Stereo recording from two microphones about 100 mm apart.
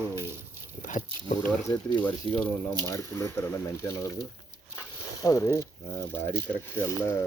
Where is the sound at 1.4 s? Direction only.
30° left (ahead or behind).